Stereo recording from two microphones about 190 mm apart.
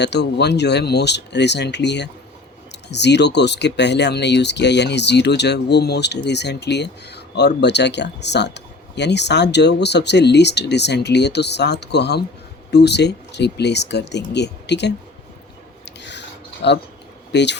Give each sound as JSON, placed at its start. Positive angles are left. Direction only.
{"t": 0.0, "sound": "speech", "side_deg": 65}
{"t": 16.6, "sound": "speech", "side_deg": 65}